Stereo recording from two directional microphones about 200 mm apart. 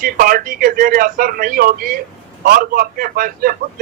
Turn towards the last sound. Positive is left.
turn(degrees=-45)  # may be behind; listen again after turning